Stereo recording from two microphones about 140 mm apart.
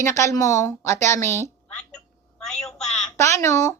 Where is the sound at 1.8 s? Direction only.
5° left (ahead or behind).